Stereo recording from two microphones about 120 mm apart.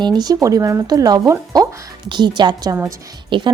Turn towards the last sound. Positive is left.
turn(degrees=-45)  # may be behind; listen again after turning